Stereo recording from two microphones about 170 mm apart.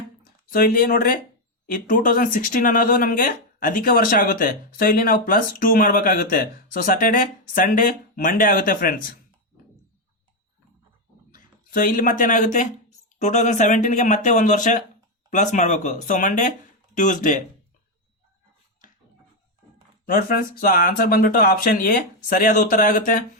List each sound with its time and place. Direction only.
0.5 s speech: 55° left (ahead or behind)
11.3 s speech: 55° left (ahead or behind)
20.1 s speech: 55° left (ahead or behind)